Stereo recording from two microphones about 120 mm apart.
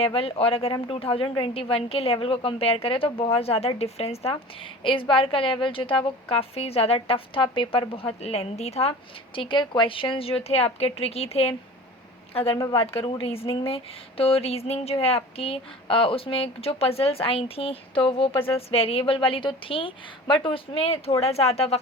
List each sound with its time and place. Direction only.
0.0 s a woman's voice: 50° left (ahead or behind)
9.3 s a woman's voice: 45° left (ahead or behind)